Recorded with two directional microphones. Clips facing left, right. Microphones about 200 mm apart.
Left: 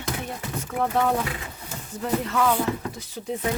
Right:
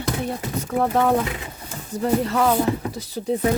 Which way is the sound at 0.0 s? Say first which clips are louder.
Right 6 dB; 35° right (ahead or behind).